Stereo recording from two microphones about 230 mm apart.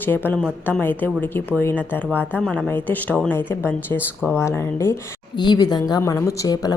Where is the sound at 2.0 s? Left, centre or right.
Centre.